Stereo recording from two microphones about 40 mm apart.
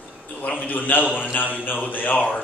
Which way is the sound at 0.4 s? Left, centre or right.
Left.